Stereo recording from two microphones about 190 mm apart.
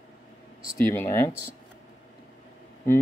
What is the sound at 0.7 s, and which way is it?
Speech, 15° left (ahead or behind).